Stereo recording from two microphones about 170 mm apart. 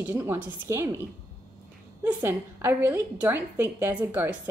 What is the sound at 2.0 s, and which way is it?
A woman's voice, 15° right (ahead or behind).